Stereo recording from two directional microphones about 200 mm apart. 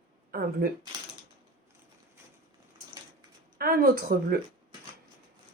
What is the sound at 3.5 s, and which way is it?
Speech, 45° right (ahead or behind).